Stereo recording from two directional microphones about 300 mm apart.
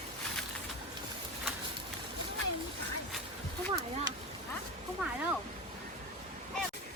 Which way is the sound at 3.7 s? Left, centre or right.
Centre.